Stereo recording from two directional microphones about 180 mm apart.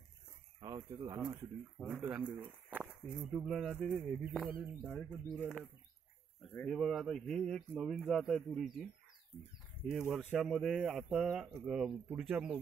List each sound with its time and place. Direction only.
0.6 s speech: 20° right (ahead or behind)
1.8 s speech: centre (ahead or behind)
6.7 s speech: centre (ahead or behind)
9.8 s speech: 5° right (ahead or behind)